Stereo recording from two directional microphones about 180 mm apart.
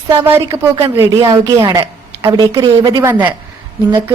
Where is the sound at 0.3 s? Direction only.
15° right (ahead or behind).